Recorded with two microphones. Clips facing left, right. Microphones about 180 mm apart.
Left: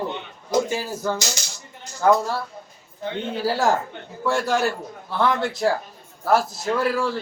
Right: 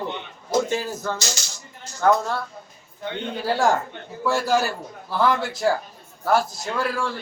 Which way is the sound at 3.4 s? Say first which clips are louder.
Even; centre (ahead or behind).